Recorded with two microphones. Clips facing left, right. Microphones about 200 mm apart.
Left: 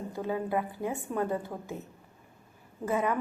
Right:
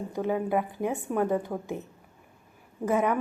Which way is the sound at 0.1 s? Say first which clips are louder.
Right 4 dB; 15° right (ahead or behind).